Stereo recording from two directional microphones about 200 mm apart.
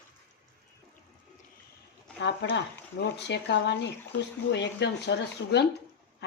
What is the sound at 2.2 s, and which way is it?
Speech, 60° left (ahead or behind).